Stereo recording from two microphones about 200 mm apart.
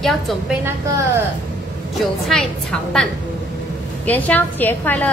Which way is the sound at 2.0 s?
Centre (ahead or behind).